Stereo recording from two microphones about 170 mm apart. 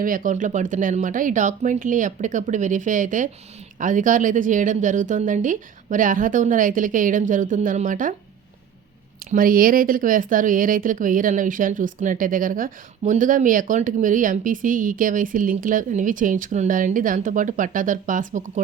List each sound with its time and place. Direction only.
0.0 s speech: 55° right (ahead or behind)
9.3 s speech: 55° right (ahead or behind)